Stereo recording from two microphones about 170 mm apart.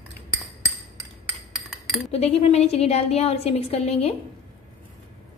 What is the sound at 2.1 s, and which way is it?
A woman's voice, 35° left (ahead or behind).